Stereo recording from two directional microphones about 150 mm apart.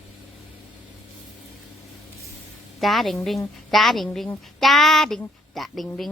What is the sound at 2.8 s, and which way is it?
A woman's voice, centre (ahead or behind).